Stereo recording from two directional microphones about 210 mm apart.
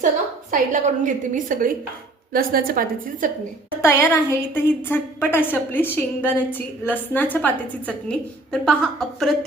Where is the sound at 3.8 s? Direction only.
10° left (ahead or behind).